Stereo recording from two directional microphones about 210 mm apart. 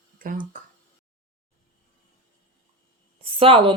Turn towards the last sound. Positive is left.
turn(degrees=-25)  # may be behind; listen again after turning